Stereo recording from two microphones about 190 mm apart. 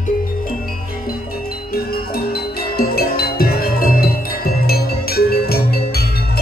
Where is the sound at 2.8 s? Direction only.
55° left (ahead or behind).